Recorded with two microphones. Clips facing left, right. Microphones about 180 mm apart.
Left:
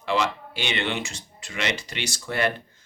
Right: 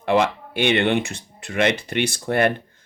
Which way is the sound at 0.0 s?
55° right (ahead or behind).